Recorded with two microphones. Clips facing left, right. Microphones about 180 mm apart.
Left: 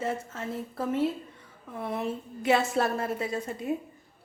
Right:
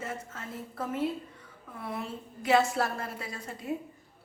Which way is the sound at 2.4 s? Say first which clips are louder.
Left 1 dB; 25° left (ahead or behind).